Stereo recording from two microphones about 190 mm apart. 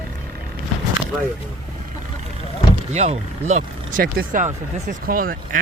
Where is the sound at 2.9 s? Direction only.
35° right (ahead or behind).